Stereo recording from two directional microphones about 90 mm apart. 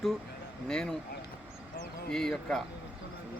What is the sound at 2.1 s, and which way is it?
Speech, 5° left (ahead or behind).